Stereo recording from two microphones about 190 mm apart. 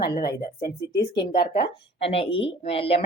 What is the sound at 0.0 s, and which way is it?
A woman's voice, 55° left (ahead or behind).